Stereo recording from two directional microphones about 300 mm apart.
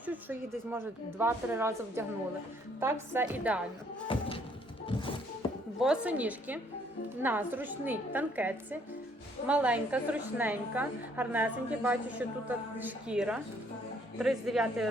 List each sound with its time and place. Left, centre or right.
0.0 s a woman's voice: centre
4.9 s music: centre
5.8 s a woman's voice: centre